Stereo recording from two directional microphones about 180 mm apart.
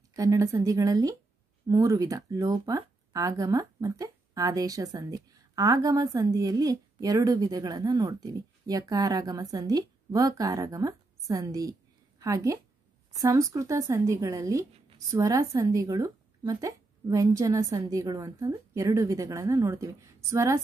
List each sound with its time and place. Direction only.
0.1 s a woman's voice: 20° right (ahead or behind)